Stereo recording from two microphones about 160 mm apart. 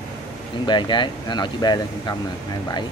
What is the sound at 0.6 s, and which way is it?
Speech, 30° left (ahead or behind).